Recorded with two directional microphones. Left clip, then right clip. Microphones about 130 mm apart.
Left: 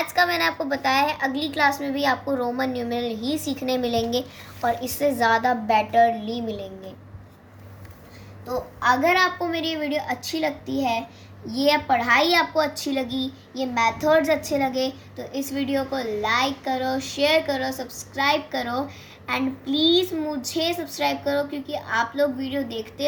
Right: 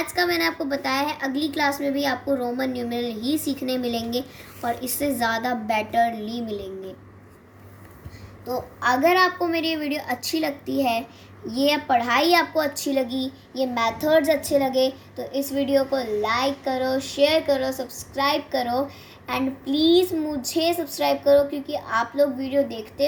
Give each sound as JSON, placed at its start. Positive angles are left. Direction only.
{"t": 0.1, "sound": "a woman's voice", "side_deg": 30}
{"t": 8.4, "sound": "a woman's voice", "side_deg": 10}